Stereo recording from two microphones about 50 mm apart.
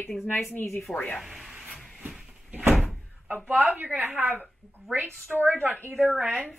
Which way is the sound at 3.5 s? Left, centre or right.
Right.